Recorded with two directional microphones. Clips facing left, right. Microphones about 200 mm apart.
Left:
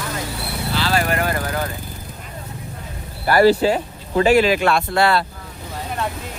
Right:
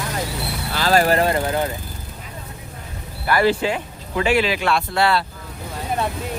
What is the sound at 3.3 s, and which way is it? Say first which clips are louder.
Speech: left 5 dB; 40° left (ahead or behind).